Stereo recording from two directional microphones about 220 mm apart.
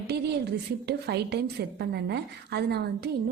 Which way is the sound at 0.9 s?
50° right (ahead or behind).